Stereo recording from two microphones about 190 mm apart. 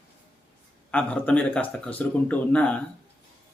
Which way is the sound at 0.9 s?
10° left (ahead or behind).